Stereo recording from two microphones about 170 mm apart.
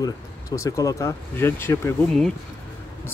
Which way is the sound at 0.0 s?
20° left (ahead or behind).